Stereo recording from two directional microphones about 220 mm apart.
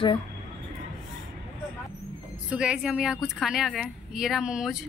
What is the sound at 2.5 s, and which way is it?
A woman's voice, 5° right (ahead or behind).